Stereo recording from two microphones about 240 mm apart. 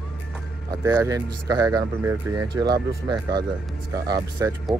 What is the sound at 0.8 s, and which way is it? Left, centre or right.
Speech, centre.